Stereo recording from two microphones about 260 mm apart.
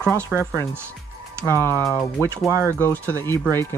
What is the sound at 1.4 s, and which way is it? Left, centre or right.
Speech, centre.